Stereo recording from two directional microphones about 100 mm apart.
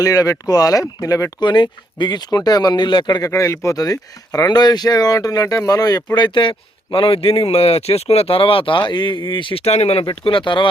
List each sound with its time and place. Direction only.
0.0 s speech: 35° left (ahead or behind)
1.4 s speech: 50° left (ahead or behind)
3.2 s speech: 30° left (ahead or behind)
6.1 s a man's voice: 55° left (ahead or behind); by 10.1 s 90° left
10.1 s a man's voice: 55° left (ahead or behind)